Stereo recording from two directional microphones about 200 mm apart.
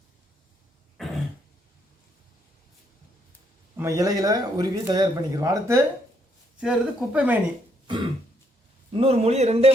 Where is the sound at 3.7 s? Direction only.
15° right (ahead or behind).